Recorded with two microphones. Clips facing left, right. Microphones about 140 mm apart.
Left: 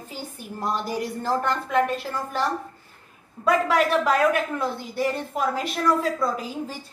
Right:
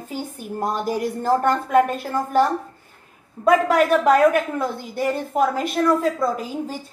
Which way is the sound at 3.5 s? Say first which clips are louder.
Right 4 dB; 45° right (ahead or behind).